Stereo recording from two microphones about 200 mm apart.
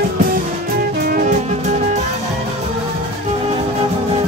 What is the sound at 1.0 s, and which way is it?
Music, 45° right (ahead or behind).